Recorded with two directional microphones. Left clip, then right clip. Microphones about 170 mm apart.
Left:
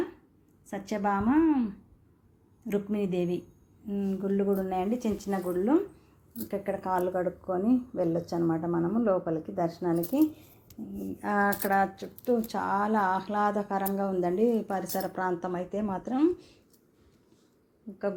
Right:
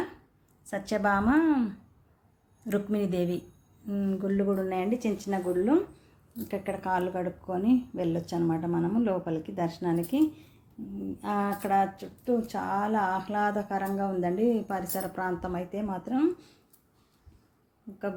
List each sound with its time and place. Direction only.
0.7 s a woman's voice: 5° right (ahead or behind)
2.6 s speech: 5° right (ahead or behind)
4.4 s speech: 5° left (ahead or behind)
6.5 s speech: centre (ahead or behind)